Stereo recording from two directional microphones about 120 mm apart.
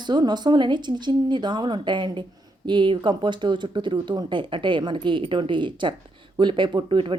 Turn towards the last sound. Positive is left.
turn(degrees=-45)  # may be behind; listen again after turning